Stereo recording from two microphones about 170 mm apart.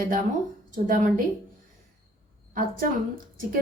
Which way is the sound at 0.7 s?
50° right (ahead or behind).